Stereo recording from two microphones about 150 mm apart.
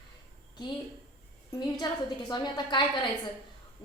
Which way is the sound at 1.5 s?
25° left (ahead or behind).